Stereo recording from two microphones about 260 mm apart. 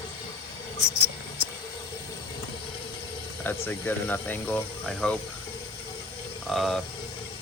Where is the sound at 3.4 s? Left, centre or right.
Centre.